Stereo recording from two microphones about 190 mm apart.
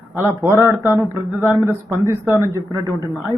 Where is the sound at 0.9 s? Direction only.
15° right (ahead or behind).